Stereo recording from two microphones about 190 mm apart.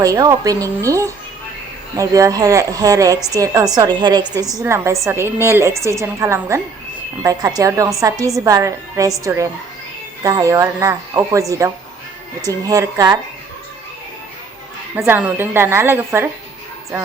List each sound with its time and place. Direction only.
0.0 s a woman's voice: 15° right (ahead or behind)
14.9 s speech: 10° right (ahead or behind)